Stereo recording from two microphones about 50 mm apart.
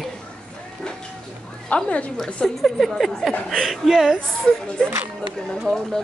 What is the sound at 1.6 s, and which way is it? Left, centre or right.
Speech, left.